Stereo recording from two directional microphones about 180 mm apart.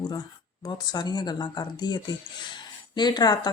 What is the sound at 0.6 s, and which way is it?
Speech, 25° left (ahead or behind).